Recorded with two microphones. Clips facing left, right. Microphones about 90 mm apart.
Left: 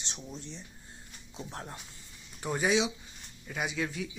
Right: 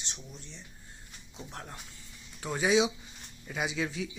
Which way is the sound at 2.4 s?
5° left (ahead or behind).